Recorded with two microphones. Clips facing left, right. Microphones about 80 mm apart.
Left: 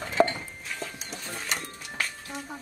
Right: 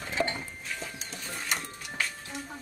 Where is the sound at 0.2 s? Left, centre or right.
Left.